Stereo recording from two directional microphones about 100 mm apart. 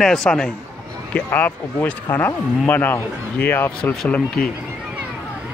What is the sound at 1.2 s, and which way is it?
Speech, 15° left (ahead or behind).